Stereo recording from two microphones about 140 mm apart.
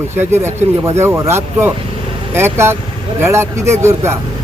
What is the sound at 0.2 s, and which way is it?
Speech, 20° right (ahead or behind).